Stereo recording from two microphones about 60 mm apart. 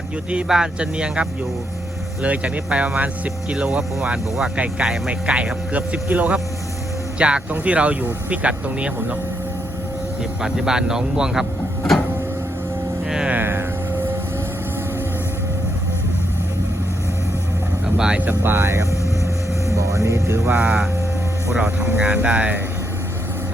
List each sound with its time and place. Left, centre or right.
0.4 s speech: centre
10.4 s speech: centre
13.1 s speech: centre
13.3 s a sound: right
17.8 s vehicle: centre
18.3 s music: right
19.7 s music: right
21.5 s speech: centre